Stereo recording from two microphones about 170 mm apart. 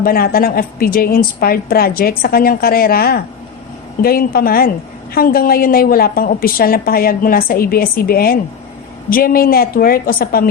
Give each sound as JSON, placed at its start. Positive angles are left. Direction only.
{"t": 0.0, "sound": "a woman's voice", "side_deg": 60}